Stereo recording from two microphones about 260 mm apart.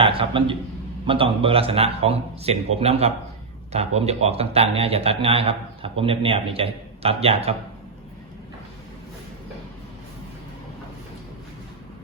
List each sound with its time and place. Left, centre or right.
0.0 s a man's voice: right